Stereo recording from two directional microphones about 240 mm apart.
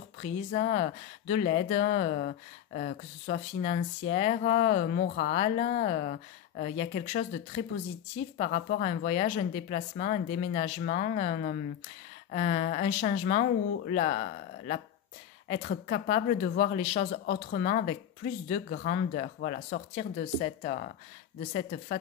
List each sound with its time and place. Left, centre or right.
0.2 s speech: left
8.4 s speech: left